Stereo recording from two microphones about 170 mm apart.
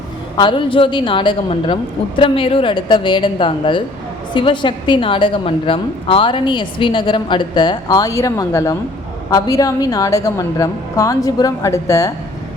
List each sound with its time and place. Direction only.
0.3 s a woman's voice: 30° left (ahead or behind)